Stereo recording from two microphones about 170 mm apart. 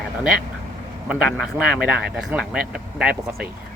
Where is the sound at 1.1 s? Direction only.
Centre (ahead or behind).